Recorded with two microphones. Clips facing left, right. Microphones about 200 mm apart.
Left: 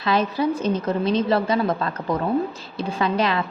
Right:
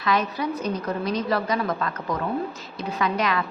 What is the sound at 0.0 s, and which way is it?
A woman's voice, 30° left (ahead or behind).